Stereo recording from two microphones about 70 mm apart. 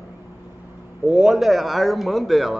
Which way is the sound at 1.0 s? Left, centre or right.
Centre.